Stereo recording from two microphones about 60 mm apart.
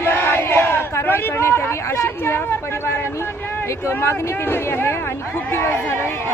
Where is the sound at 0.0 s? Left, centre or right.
Left.